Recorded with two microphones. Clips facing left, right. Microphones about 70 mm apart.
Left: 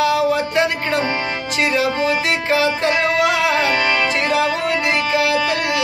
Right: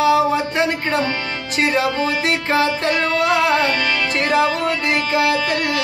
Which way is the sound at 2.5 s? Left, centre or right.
Right.